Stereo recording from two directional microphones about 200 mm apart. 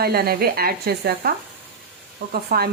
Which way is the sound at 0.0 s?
50° right (ahead or behind).